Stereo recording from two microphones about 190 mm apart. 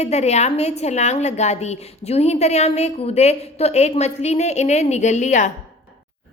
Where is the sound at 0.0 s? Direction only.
35° left (ahead or behind).